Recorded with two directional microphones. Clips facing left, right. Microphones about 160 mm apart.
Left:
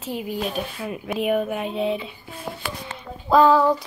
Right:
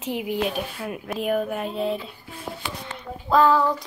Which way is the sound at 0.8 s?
Centre (ahead or behind).